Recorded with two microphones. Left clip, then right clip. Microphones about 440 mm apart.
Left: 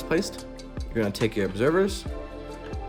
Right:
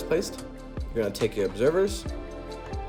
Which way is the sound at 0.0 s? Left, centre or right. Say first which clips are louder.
Even; centre.